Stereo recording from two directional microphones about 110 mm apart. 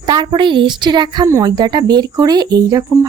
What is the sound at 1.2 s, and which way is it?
Speech, 30° right (ahead or behind).